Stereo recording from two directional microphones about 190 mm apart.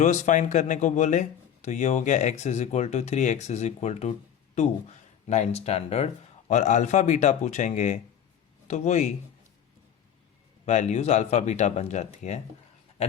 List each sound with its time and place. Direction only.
0.0 s speech: 40° left (ahead or behind)
5.3 s speech: 35° left (ahead or behind)
10.7 s speech: 40° left (ahead or behind)